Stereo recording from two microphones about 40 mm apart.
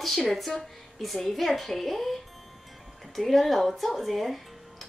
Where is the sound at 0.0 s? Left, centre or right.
Centre.